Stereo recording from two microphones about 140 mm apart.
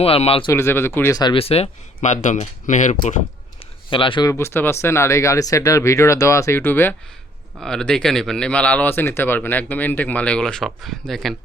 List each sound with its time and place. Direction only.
0.0 s speech: 45° left (ahead or behind)
0.5 s speech: 15° left (ahead or behind)
1.2 s speech: 40° left (ahead or behind)
2.0 s speech: 60° left (ahead or behind)
3.8 s speech: 35° left (ahead or behind)
4.3 s speech: 20° left (ahead or behind)
7.6 s speech: 5° left (ahead or behind)